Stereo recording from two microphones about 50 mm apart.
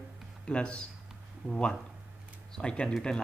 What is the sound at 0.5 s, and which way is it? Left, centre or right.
Speech, left.